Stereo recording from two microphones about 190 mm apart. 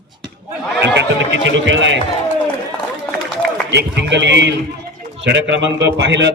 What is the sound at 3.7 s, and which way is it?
A man's voice, 65° right (ahead or behind).